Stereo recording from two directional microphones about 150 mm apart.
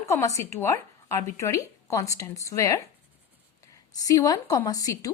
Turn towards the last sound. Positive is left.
turn(degrees=25)  # may be behind; listen again after turning